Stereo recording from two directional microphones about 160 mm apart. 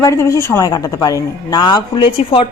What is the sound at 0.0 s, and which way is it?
Speech, 20° left (ahead or behind).